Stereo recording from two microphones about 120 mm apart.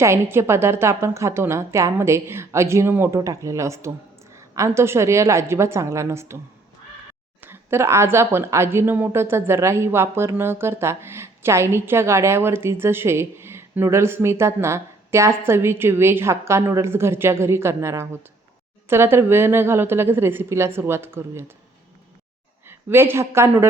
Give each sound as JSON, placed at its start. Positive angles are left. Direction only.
{"t": 0.0, "sound": "a woman's voice", "side_deg": -20}
{"t": 7.4, "sound": "a woman's voice", "side_deg": -20}
{"t": 22.6, "sound": "a woman's voice", "side_deg": -20}